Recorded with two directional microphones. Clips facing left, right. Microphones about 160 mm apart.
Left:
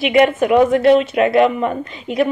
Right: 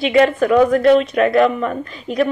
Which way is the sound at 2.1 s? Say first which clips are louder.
Even; centre (ahead or behind).